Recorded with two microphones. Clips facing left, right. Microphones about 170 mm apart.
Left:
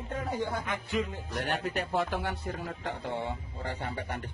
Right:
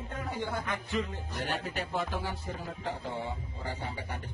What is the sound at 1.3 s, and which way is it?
Speech, 65° left (ahead or behind).